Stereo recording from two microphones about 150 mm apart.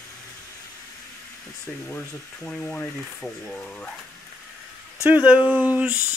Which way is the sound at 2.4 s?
5° left (ahead or behind).